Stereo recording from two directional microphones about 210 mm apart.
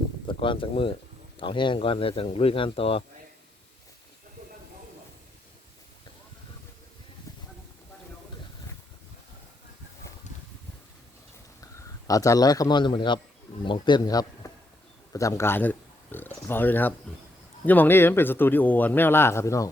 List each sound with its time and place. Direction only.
0.3 s speech: 25° left (ahead or behind)
11.8 s speech: 15° left (ahead or behind)